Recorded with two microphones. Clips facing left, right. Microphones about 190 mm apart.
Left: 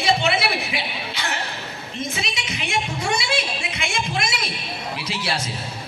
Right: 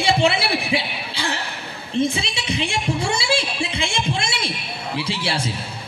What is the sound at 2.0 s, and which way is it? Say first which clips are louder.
Music: right 8 dB; 30° right (ahead or behind).